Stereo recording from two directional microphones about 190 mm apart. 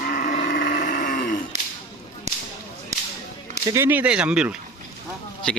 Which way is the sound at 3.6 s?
15° right (ahead or behind).